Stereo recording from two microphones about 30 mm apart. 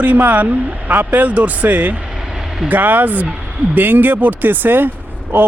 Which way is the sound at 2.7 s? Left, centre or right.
Right.